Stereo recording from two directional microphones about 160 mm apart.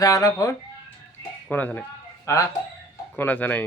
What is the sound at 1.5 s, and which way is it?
Speech, 10° left (ahead or behind).